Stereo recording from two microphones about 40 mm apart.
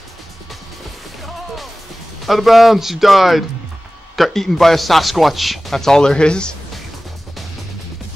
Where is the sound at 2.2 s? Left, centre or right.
Centre; by 6.5 s left.